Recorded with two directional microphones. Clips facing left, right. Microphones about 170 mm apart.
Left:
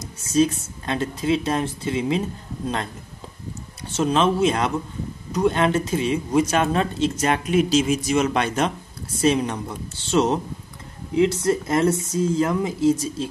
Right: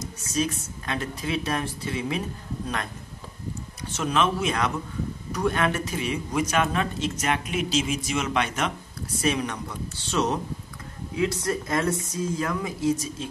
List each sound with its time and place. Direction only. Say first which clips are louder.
0.0 s a woman's voice: left 8 dB; 30° left (ahead or behind)
3.9 s a woman's voice: left 5 dB; 30° left (ahead or behind)